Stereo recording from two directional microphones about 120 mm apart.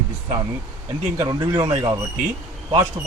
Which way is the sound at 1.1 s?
30° right (ahead or behind).